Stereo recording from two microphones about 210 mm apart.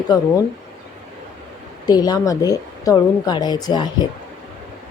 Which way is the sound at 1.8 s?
20° left (ahead or behind).